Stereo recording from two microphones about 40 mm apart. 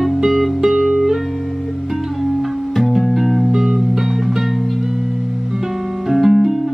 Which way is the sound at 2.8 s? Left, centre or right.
Centre.